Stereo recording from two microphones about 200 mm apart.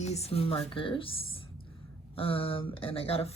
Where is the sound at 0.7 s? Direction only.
25° left (ahead or behind).